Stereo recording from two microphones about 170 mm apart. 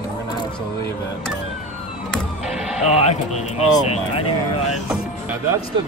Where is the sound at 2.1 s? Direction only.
5° right (ahead or behind).